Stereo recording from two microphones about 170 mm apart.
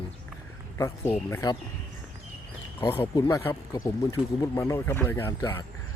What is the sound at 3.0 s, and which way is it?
Speech, 15° left (ahead or behind).